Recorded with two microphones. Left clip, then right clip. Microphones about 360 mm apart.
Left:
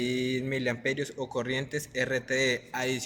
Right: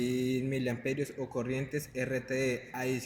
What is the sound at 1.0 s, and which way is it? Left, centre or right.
A man's voice, left.